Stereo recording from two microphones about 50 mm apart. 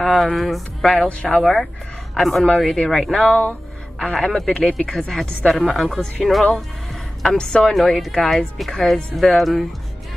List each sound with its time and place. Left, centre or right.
0.4 s speech: centre
1.0 s speech: left
1.4 s a woman's voice: centre
7.6 s speech: centre